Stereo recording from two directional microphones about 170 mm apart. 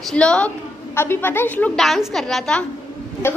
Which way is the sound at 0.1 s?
5° left (ahead or behind).